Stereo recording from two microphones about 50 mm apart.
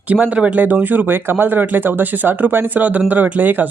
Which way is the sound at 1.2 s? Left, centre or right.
Right.